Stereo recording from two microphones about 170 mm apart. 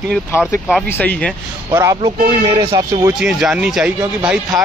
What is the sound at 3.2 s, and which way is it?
Speech, 5° right (ahead or behind).